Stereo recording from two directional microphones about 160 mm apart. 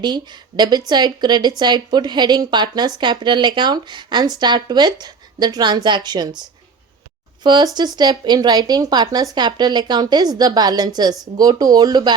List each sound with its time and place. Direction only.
0.0 s speech: 25° right (ahead or behind)
7.4 s speech: 25° right (ahead or behind)